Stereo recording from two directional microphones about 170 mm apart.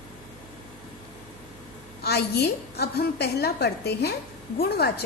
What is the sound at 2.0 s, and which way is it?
A woman's voice, 70° left (ahead or behind).